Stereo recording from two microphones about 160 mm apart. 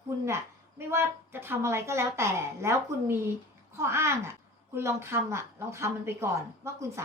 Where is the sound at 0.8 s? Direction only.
15° right (ahead or behind).